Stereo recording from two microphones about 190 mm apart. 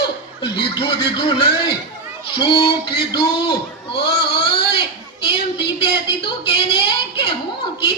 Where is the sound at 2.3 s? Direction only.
30° left (ahead or behind).